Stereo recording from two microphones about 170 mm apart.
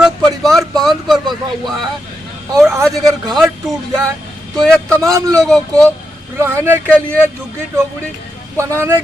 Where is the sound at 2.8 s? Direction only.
Centre (ahead or behind).